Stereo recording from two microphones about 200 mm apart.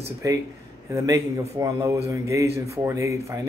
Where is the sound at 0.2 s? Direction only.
15° right (ahead or behind).